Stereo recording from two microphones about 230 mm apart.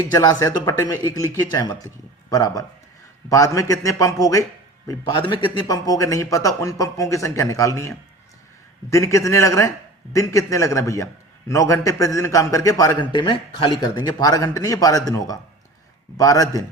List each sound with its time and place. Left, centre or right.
0.0 s a man's voice: centre